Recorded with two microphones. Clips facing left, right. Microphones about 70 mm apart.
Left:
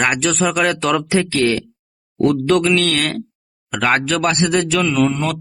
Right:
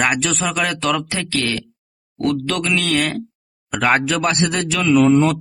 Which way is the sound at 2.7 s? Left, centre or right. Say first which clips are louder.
Left 1 dB; centre.